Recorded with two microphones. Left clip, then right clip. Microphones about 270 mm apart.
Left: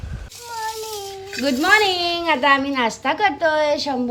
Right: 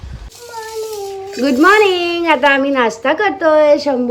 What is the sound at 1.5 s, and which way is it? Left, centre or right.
Speech, centre.